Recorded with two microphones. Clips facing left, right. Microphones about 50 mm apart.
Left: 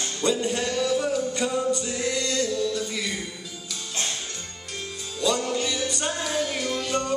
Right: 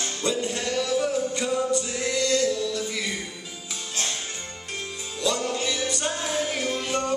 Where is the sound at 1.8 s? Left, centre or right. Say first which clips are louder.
Left 1 dB; centre.